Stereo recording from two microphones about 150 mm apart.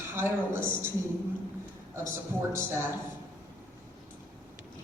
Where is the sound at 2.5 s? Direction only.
15° right (ahead or behind).